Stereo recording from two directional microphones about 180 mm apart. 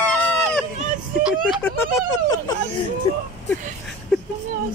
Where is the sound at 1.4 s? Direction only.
10° left (ahead or behind).